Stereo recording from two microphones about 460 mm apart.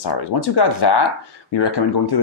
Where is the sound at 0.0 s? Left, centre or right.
Left.